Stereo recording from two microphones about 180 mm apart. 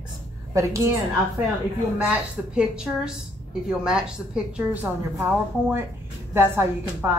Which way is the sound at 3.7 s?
5° right (ahead or behind).